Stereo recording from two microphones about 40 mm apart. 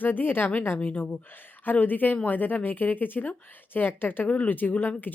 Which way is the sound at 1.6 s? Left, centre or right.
Left.